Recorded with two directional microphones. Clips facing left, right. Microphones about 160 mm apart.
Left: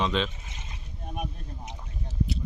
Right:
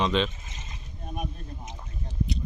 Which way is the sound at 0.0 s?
Centre (ahead or behind).